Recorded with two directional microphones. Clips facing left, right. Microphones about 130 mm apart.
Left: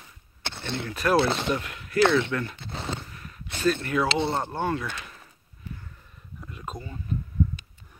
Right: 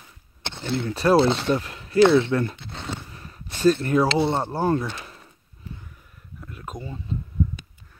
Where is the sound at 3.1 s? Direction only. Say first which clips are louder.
Even; 30° right (ahead or behind).